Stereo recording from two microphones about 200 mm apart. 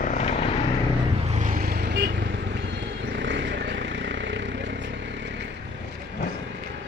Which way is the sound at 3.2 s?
65° right (ahead or behind).